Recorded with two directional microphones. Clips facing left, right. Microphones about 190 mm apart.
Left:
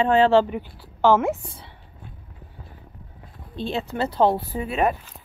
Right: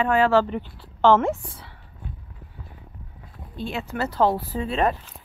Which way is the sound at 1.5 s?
20° left (ahead or behind).